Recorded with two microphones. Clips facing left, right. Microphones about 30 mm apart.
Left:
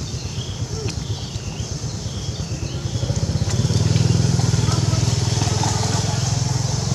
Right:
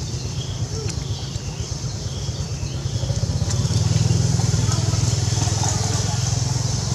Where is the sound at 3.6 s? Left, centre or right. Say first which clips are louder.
Left 3 dB; centre.